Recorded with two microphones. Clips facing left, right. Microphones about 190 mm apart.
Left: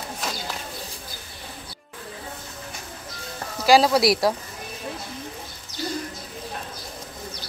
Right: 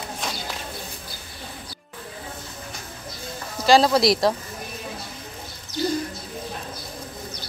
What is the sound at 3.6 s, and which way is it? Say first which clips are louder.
Speech: even; 5° left (ahead or behind).